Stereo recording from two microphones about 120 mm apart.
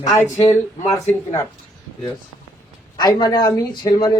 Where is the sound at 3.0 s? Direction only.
35° left (ahead or behind).